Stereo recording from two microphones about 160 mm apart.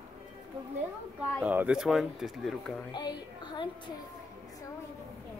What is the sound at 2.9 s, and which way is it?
Speech, 25° left (ahead or behind).